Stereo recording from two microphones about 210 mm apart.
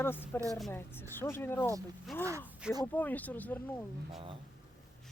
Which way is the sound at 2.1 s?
Centre (ahead or behind).